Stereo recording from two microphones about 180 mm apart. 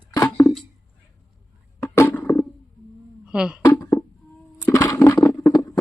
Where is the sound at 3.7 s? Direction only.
15° left (ahead or behind).